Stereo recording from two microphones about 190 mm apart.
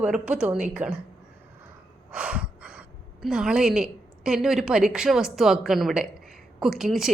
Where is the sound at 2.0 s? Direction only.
5° right (ahead or behind).